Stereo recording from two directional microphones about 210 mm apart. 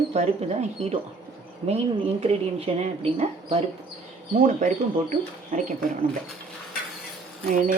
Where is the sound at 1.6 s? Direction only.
30° right (ahead or behind).